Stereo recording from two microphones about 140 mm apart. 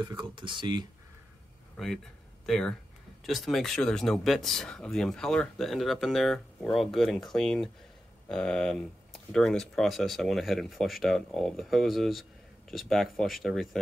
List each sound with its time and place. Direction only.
0.0 s speech: 35° right (ahead or behind)
2.4 s speech: 5° left (ahead or behind)